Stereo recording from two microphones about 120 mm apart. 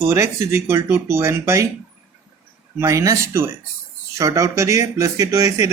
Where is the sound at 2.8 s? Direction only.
25° right (ahead or behind).